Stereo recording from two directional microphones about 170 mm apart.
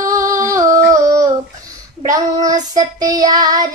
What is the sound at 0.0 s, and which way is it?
Singing, 20° right (ahead or behind).